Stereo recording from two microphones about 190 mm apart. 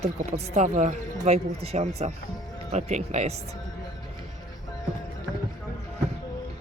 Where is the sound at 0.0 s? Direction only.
35° right (ahead or behind).